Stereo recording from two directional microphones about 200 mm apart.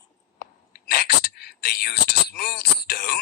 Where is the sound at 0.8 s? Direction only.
50° left (ahead or behind).